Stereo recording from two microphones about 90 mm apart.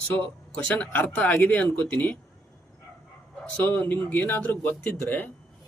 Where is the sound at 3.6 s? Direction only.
20° left (ahead or behind).